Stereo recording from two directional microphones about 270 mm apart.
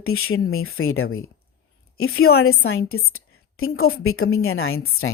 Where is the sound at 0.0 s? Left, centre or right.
Left.